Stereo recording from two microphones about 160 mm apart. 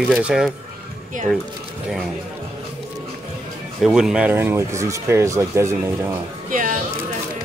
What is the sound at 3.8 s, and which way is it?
Speech, 5° right (ahead or behind).